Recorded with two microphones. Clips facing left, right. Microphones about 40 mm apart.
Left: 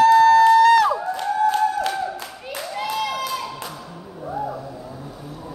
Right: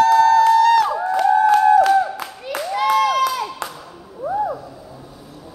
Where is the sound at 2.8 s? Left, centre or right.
Right.